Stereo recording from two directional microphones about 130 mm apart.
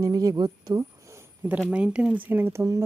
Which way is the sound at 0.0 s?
25° right (ahead or behind).